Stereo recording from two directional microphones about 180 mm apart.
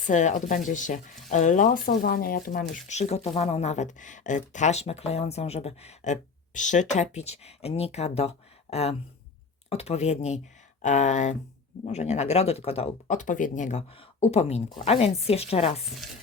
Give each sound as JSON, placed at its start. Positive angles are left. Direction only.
{"t": 0.1, "sound": "speech", "side_deg": 40}
{"t": 2.8, "sound": "speech", "side_deg": 35}